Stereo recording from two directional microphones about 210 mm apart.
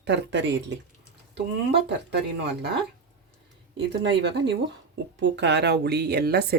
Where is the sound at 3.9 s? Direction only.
55° right (ahead or behind).